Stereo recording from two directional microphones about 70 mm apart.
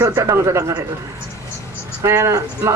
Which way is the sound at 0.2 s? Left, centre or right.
Right.